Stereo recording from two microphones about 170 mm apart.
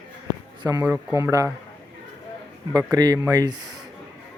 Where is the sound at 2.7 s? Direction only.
20° right (ahead or behind).